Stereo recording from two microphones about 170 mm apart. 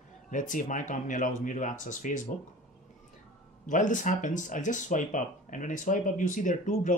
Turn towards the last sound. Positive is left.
turn(degrees=50)  # may be behind; listen again after turning